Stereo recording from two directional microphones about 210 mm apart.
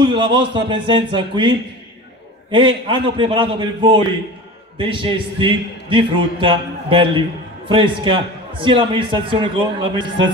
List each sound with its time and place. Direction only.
0.0 s a man's voice: 25° right (ahead or behind)
2.5 s a man's voice: 25° right (ahead or behind)